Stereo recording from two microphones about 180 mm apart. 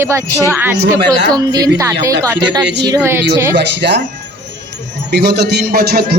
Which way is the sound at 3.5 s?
75° right (ahead or behind).